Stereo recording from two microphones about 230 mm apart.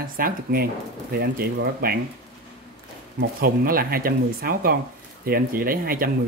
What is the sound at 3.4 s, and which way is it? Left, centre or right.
Speech, right.